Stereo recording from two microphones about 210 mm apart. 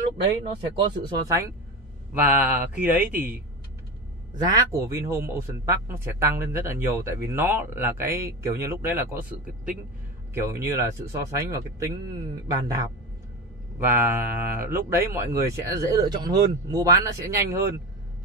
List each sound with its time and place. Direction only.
1.2 s speech: 15° right (ahead or behind)
4.4 s speech: 15° right (ahead or behind)